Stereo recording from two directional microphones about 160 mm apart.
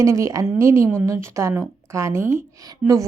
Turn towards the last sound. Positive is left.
turn(degrees=-20)  # may be behind; listen again after turning